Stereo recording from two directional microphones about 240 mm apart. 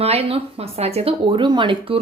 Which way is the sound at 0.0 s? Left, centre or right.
Right.